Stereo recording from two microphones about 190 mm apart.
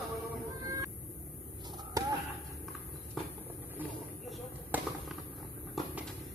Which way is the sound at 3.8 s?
10° right (ahead or behind).